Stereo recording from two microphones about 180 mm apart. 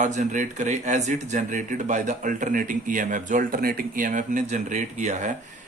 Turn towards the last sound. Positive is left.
turn(degrees=-40)  # may be behind; listen again after turning